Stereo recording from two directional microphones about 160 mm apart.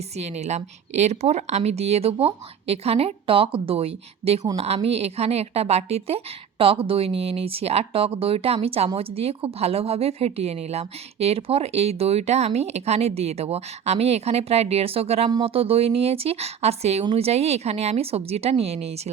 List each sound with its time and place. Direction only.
0.2 s speech: 45° right (ahead or behind)